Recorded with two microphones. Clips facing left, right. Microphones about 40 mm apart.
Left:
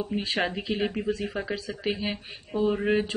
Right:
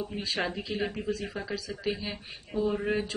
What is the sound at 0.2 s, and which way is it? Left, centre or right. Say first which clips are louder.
Speech: left 3 dB; left.